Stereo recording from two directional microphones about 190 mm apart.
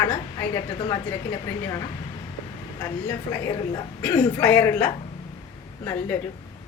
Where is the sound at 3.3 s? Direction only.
15° left (ahead or behind).